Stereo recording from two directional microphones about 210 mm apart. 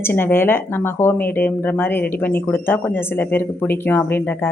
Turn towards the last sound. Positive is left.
turn(degrees=10)  # may be behind; listen again after turning